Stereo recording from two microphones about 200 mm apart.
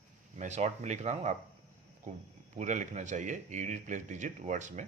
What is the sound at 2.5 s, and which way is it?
Speech, 40° right (ahead or behind).